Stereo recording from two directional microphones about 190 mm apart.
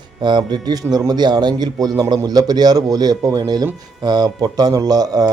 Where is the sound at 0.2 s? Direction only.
25° right (ahead or behind).